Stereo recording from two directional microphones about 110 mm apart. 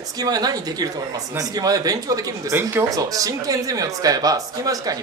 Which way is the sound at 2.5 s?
20° right (ahead or behind).